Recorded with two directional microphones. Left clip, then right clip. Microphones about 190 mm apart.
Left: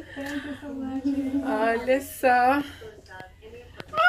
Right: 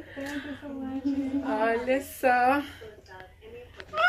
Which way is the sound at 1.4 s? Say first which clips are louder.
Left 2 dB; 5° left (ahead or behind).